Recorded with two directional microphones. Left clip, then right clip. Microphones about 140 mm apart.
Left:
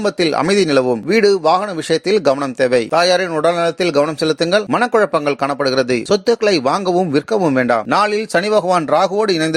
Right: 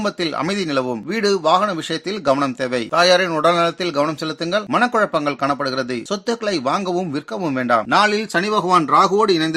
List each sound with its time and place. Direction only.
0.0 s speech: 40° left (ahead or behind)
4.5 s speech: 45° left (ahead or behind)